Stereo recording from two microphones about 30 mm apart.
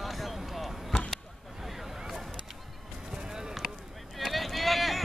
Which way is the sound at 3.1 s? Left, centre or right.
Right.